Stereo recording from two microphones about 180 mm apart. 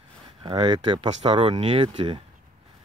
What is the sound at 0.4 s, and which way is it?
Speech, 25° right (ahead or behind).